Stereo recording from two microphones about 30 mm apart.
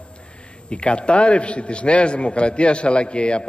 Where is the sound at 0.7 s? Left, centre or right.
Left.